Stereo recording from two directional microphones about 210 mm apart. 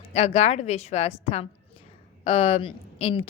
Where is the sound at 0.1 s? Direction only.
30° left (ahead or behind).